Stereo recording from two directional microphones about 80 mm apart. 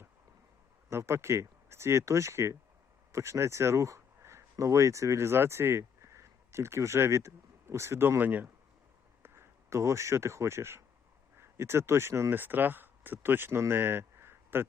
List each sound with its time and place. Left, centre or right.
0.9 s speech: right